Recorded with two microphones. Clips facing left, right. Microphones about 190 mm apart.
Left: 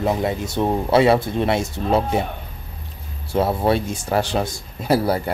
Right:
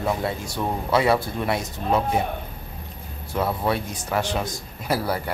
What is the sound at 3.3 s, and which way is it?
Speech, 30° left (ahead or behind).